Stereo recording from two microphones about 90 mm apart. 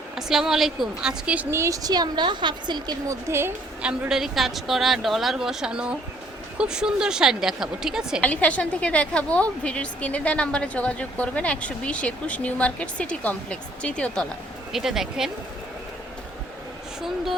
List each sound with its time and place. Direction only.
0.2 s speech: 5° right (ahead or behind)
1.5 s a woman's voice: 30° right (ahead or behind); by 2.9 s 55° right (ahead or behind)
3.1 s a woman's voice: 30° right (ahead or behind)
3.8 s speech: 10° right (ahead or behind)
8.2 s a woman's voice: 15° left (ahead or behind)
14.7 s speech: 5° right (ahead or behind)